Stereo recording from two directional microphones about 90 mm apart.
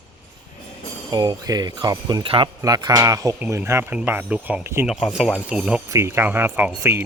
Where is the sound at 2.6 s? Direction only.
45° right (ahead or behind); by 4.6 s 15° right (ahead or behind).